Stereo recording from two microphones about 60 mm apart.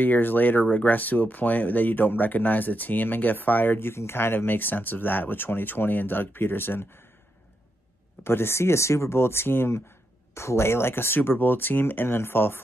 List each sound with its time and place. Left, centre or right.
0.0 s speech: left
8.2 s speech: left